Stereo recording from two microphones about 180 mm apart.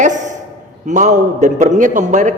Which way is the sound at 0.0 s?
45° right (ahead or behind).